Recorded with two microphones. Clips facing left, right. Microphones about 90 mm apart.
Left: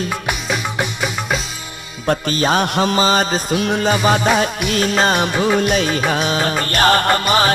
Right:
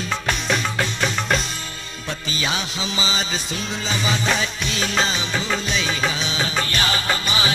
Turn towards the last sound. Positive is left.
turn(degrees=50)  # may be behind; listen again after turning